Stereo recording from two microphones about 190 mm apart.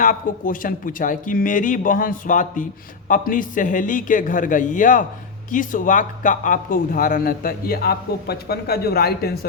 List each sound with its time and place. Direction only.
0.0 s speech: 45° left (ahead or behind)